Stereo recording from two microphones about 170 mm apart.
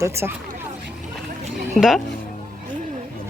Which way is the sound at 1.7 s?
Centre (ahead or behind).